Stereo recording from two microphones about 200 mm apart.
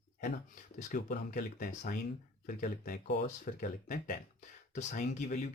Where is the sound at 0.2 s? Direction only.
40° left (ahead or behind).